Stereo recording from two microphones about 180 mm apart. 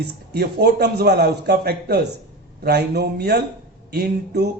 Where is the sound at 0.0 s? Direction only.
65° right (ahead or behind).